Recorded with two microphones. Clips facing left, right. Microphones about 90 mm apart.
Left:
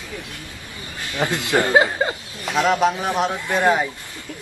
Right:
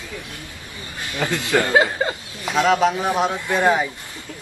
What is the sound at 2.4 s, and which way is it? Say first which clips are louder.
Speech: right 1 dB; centre (ahead or behind).